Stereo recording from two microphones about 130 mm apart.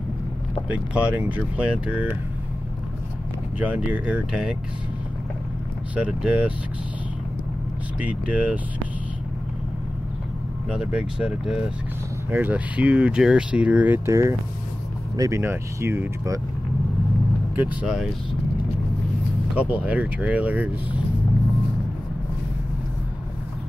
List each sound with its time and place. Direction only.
0.7 s speech: 10° right (ahead or behind)
3.5 s speech: 10° right (ahead or behind)
5.9 s speech: 10° right (ahead or behind)
8.0 s speech: 10° right (ahead or behind)
10.7 s speech: 10° right (ahead or behind)
17.6 s speech: 10° right (ahead or behind)
19.7 s speech: 10° right (ahead or behind)